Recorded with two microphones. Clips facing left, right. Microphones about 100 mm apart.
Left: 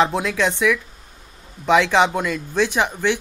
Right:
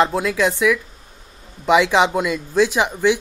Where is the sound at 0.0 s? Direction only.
Centre (ahead or behind).